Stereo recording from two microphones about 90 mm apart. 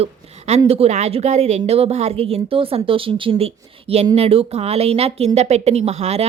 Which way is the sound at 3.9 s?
90° right.